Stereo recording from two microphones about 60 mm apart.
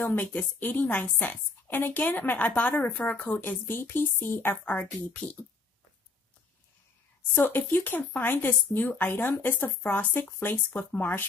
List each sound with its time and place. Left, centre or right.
0.0 s a woman's voice: left
7.3 s speech: left